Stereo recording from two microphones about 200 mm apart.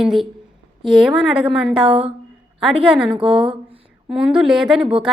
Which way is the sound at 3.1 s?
25° right (ahead or behind).